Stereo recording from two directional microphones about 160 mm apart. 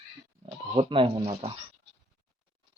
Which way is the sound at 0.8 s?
35° right (ahead or behind).